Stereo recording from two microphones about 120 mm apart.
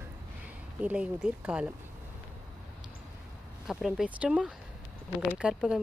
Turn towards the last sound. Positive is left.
turn(degrees=-5)  # may be behind; listen again after turning